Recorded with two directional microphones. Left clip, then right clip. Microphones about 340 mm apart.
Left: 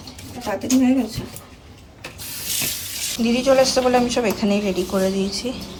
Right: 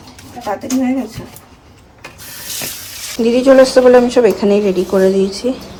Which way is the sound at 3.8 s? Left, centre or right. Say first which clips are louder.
Right 10 dB; right.